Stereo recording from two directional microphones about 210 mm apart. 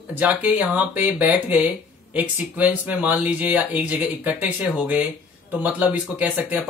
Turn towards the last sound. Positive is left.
turn(degrees=-5)  # may be behind; listen again after turning